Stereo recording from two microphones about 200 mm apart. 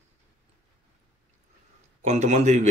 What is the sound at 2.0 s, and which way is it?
Speech, 35° right (ahead or behind).